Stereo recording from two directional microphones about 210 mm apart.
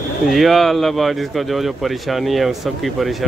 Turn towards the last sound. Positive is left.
turn(degrees=0)  # may be behind; listen again after turning